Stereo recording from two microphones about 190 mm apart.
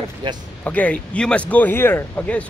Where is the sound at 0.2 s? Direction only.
25° right (ahead or behind).